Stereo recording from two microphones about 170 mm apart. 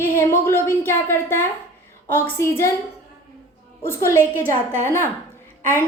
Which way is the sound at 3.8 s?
15° left (ahead or behind).